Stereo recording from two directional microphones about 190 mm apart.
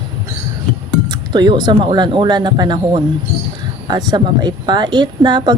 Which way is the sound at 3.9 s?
20° right (ahead or behind).